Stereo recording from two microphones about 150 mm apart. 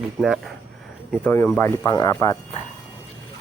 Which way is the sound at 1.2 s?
15° left (ahead or behind).